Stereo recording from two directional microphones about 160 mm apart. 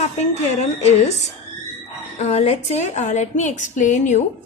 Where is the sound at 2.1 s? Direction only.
40° left (ahead or behind).